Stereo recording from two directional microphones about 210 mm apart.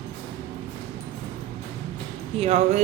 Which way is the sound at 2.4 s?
30° right (ahead or behind).